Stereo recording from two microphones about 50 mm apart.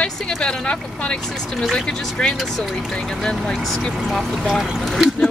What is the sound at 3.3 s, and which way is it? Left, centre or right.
Speech, centre.